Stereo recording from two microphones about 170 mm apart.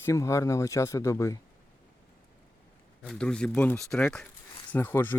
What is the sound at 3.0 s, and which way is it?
Speech, 5° left (ahead or behind).